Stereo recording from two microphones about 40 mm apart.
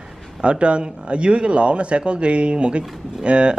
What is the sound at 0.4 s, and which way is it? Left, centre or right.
Speech, right.